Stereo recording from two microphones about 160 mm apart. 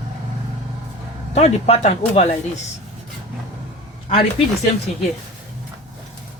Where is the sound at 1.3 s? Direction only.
45° left (ahead or behind).